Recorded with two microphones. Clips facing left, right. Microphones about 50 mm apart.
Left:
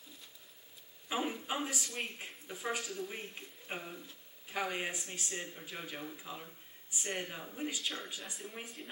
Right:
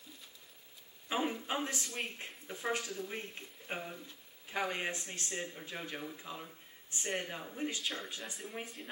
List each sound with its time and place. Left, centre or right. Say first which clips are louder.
1.0 s speech: right 1 dB; centre